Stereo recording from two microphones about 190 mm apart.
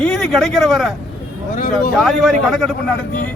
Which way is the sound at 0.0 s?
Centre (ahead or behind).